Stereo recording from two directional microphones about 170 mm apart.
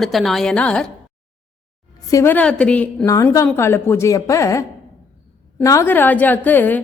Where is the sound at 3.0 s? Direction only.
20° left (ahead or behind).